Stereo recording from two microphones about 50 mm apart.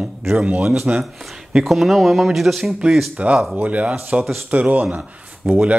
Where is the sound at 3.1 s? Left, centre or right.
Right.